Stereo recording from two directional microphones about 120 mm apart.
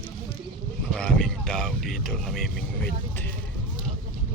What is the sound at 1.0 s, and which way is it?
Speech, 10° left (ahead or behind).